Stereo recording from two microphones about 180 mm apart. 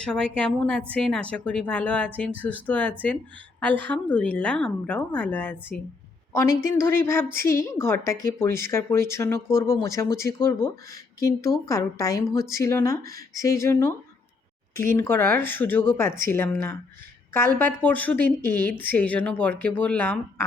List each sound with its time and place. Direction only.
0.0 s a woman's voice: 5° left (ahead or behind)
14.9 s a woman's voice: 15° left (ahead or behind)
17.7 s a woman's voice: 10° left (ahead or behind)